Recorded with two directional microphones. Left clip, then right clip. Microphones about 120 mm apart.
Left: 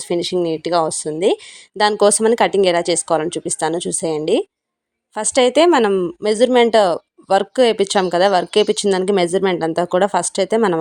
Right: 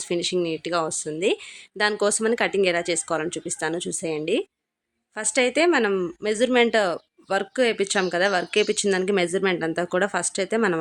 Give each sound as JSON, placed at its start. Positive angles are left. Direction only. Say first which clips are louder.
{"t": 0.1, "sound": "speech", "louder": "left 6 dB", "side_deg": 40}